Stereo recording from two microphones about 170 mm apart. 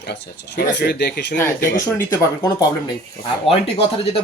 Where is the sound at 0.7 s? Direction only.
75° left (ahead or behind).